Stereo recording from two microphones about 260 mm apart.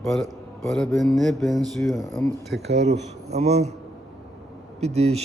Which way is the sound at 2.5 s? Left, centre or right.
Right.